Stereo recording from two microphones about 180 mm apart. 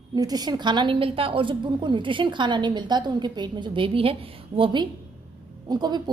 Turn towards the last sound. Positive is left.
turn(degrees=-25)  # may be behind; listen again after turning